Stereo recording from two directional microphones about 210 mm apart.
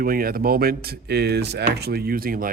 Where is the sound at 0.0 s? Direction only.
45° right (ahead or behind).